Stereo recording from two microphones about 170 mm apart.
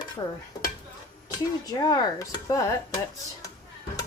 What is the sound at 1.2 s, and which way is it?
Speech, 20° left (ahead or behind).